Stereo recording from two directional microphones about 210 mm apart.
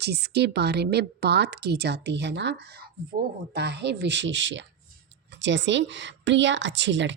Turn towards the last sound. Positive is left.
turn(degrees=-60)  # may be behind; listen again after turning